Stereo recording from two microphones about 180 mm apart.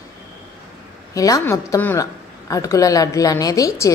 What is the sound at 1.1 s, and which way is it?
A woman's voice, 20° left (ahead or behind).